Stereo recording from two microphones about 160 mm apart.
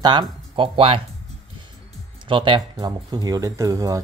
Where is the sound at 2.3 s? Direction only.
30° right (ahead or behind).